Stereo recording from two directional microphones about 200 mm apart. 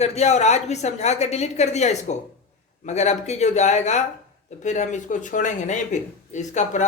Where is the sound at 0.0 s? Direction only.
35° left (ahead or behind).